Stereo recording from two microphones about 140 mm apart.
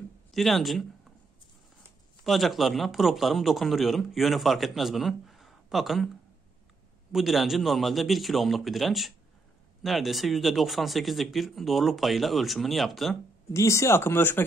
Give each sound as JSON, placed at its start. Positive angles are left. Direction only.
{"t": 0.3, "sound": "speech", "side_deg": 0}
{"t": 2.2, "sound": "speech", "side_deg": 0}
{"t": 7.1, "sound": "speech", "side_deg": 0}
{"t": 13.5, "sound": "speech", "side_deg": 20}